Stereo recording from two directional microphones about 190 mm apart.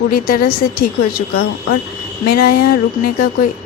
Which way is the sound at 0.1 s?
50° left (ahead or behind).